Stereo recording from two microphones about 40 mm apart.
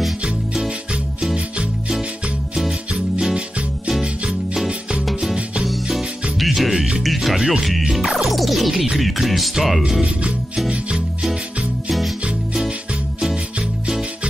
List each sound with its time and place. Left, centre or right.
5.3 s music: right
6.3 s music: centre
10.7 s music: right